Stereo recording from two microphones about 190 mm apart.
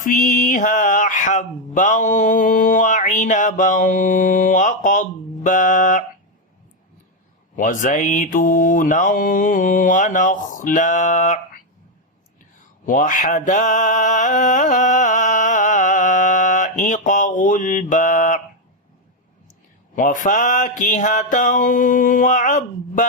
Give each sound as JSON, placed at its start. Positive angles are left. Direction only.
{"t": 0.0, "sound": "mantra", "side_deg": 45}
{"t": 7.5, "sound": "mantra", "side_deg": 40}
{"t": 12.8, "sound": "mantra", "side_deg": 45}
{"t": 20.0, "sound": "mantra", "side_deg": 45}